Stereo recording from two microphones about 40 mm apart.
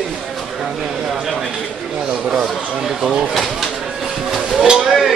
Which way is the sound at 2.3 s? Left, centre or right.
Centre.